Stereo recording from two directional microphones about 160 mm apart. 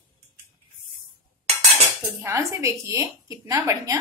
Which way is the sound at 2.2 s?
20° right (ahead or behind).